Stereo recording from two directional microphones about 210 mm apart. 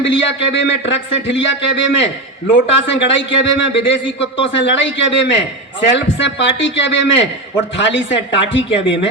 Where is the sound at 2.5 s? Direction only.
60° left (ahead or behind).